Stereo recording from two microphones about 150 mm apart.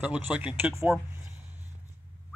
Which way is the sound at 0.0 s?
10° right (ahead or behind).